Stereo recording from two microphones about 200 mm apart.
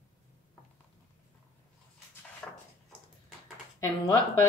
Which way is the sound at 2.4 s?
5° left (ahead or behind).